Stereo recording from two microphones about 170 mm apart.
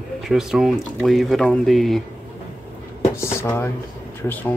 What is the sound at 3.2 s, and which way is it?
Drawer open or close, 15° left (ahead or behind).